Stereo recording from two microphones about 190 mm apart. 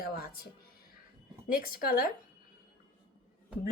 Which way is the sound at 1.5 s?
50° left (ahead or behind).